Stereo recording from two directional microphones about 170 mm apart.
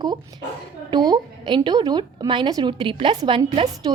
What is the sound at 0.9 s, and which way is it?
A woman's voice, 25° right (ahead or behind).